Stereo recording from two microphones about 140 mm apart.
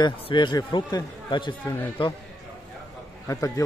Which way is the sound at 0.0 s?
35° left (ahead or behind).